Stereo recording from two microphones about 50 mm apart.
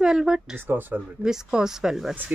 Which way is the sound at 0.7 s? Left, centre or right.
Right.